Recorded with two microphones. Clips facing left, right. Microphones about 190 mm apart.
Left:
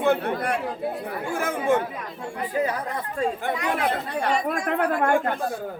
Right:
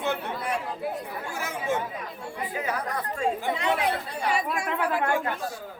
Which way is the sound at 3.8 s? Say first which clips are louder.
Left 3 dB; 60° left (ahead or behind).